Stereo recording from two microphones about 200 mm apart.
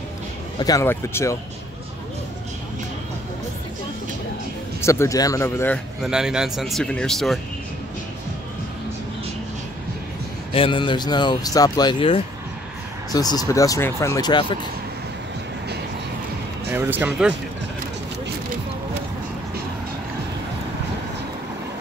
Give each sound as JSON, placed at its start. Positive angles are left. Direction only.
{"t": 0.6, "sound": "speech", "side_deg": 15}
{"t": 4.8, "sound": "speech", "side_deg": 15}
{"t": 6.0, "sound": "speech", "side_deg": -5}
{"t": 10.5, "sound": "speech", "side_deg": 25}
{"t": 16.7, "sound": "speech", "side_deg": -10}